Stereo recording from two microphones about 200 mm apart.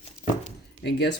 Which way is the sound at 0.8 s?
60° left (ahead or behind).